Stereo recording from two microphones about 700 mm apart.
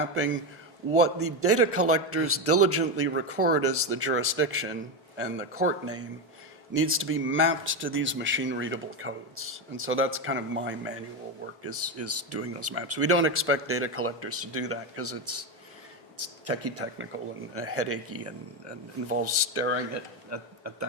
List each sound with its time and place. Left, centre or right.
0.9 s a man's voice: centre